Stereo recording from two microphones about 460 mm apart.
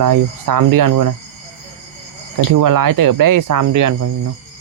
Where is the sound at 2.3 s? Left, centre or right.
Right.